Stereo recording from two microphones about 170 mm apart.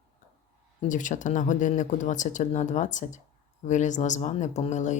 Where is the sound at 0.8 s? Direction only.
50° left (ahead or behind).